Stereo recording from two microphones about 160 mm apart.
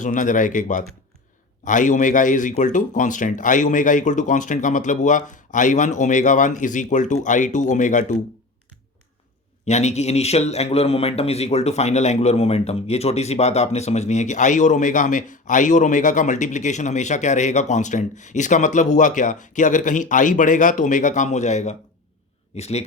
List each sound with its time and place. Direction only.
0.0 s a man's voice: 55° left (ahead or behind)
9.6 s a man's voice: 45° left (ahead or behind)